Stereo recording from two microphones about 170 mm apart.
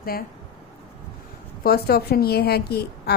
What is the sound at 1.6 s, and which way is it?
A woman's voice, 65° left (ahead or behind).